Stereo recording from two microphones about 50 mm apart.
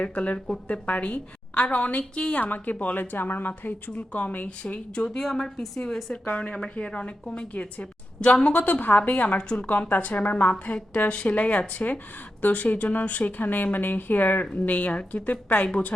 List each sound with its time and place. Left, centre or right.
0.0 s a woman's voice: left
0.7 s a woman's voice: left
2.4 s a woman's voice: left
4.4 s a woman's voice: centre
6.2 s a woman's voice: left
8.6 s a woman's voice: left
9.4 s a woman's voice: left
9.6 s a woman's voice: left